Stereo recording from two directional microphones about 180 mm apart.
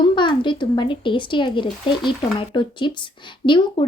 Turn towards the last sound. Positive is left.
turn(degrees=25)  # may be behind; listen again after turning